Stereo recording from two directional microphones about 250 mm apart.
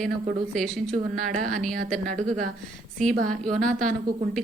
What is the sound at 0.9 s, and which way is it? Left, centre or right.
A woman's voice, right.